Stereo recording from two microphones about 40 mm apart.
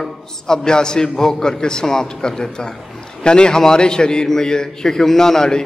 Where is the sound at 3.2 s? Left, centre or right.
Left.